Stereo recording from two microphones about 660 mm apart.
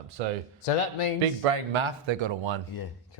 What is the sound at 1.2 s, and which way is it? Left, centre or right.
Speech, right.